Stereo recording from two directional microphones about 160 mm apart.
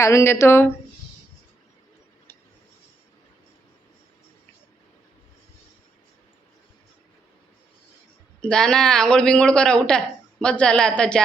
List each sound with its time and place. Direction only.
0.0 s speech: 20° left (ahead or behind)
8.4 s a man's voice: 5° left (ahead or behind)